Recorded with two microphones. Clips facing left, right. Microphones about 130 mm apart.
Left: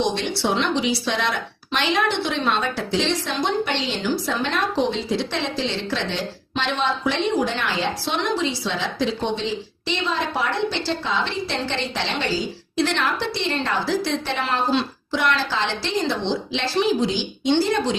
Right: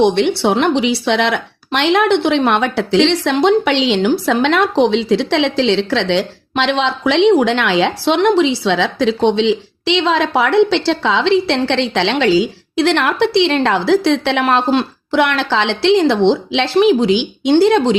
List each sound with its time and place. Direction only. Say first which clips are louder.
0.0 s speech: right 10 dB; 65° right (ahead or behind)